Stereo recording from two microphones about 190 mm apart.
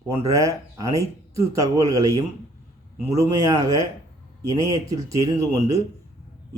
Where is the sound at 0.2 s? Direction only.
15° right (ahead or behind).